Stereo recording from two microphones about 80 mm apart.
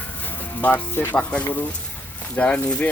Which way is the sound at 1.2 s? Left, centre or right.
Centre.